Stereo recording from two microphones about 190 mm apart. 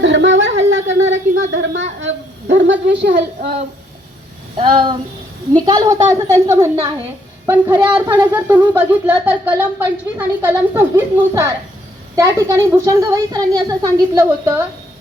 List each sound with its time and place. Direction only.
0.0 s a sound: 75° right (ahead or behind)
4.5 s child singing: 25° right (ahead or behind)
6.1 s a woman's voice: 15° right (ahead or behind)